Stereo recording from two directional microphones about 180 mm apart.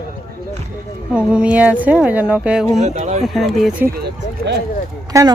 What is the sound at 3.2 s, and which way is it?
Speech, centre (ahead or behind).